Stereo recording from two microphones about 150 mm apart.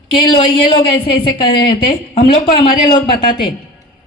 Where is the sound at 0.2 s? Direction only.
35° left (ahead or behind).